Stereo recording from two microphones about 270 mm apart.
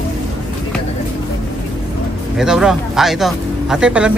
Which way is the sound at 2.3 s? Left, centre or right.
Centre.